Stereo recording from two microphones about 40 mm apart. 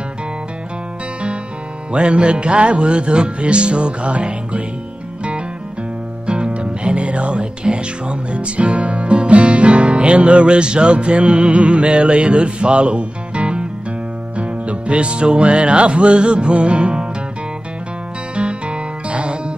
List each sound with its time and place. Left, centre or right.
1.9 s music: right
6.2 s music: right
18.3 s music: right